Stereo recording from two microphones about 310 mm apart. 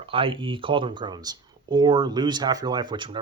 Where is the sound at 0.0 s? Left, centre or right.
Centre.